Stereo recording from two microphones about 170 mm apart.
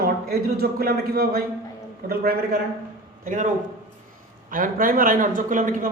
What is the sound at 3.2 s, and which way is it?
Speech, 50° right (ahead or behind).